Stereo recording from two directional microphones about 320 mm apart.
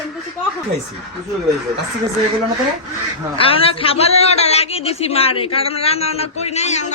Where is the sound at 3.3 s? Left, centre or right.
Centre.